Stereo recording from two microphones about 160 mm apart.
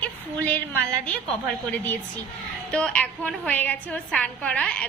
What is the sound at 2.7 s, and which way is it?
A woman's voice, 5° left (ahead or behind).